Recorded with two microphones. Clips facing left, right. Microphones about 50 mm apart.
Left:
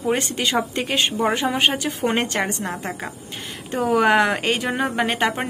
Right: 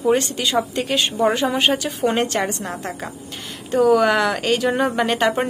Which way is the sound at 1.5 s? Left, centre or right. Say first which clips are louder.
Right 1 dB; left.